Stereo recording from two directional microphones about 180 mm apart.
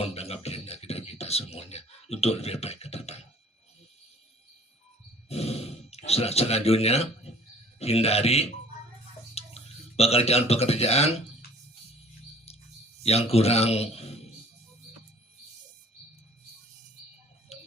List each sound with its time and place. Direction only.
0.0 s beatboxing: 35° left (ahead or behind)
5.3 s sigh: 35° left (ahead or behind)
7.8 s a man's voice: 35° left (ahead or behind)
12.5 s a sound: 35° left (ahead or behind)
13.0 s a man's voice: 35° left (ahead or behind)